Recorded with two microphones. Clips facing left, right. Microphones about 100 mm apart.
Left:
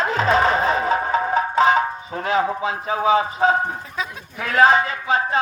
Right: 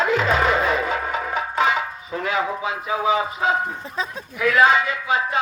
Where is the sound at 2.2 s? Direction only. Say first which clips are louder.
Left 3 dB; 35° left (ahead or behind).